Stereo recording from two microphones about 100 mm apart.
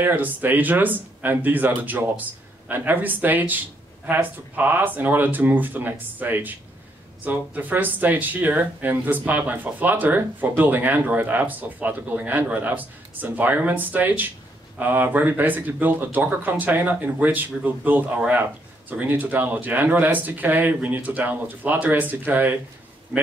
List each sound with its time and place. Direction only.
0.0 s speech: 20° right (ahead or behind)